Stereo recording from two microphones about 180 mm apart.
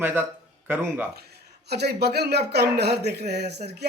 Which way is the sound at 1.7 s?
65° right (ahead or behind).